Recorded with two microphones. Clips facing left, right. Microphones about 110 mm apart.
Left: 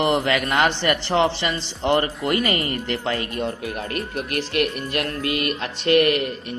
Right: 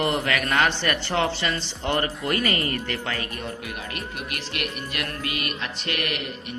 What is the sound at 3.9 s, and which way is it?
Speech, 40° left (ahead or behind).